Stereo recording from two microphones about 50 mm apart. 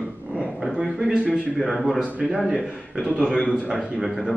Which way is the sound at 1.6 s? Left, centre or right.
Centre.